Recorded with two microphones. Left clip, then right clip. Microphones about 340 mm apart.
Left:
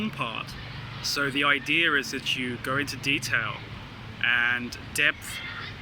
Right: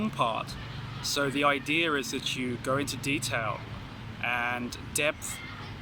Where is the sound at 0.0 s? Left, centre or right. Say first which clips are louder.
Right 3 dB; centre.